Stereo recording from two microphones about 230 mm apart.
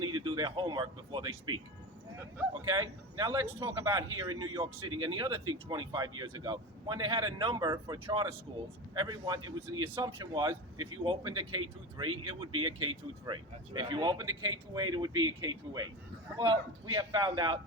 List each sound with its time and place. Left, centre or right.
0.0 s a man's voice: centre
16.9 s speech: centre